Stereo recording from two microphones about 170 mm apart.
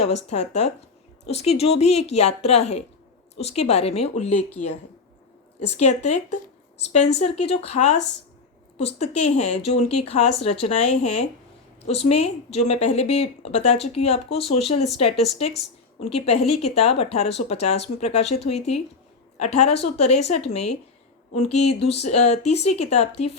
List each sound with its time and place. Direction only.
0.3 s a woman's voice: 40° left (ahead or behind)
5.7 s a woman's voice: 40° left (ahead or behind)
7.2 s a woman's voice: 40° left (ahead or behind)